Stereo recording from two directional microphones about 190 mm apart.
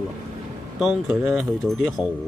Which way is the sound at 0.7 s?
5° right (ahead or behind).